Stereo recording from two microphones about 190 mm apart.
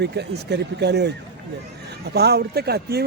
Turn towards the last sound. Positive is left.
turn(degrees=-60)  # may be behind; listen again after turning